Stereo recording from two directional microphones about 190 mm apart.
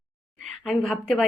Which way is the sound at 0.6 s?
Centre (ahead or behind).